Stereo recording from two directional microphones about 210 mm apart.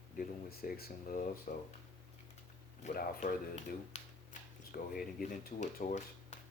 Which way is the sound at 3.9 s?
30° left (ahead or behind).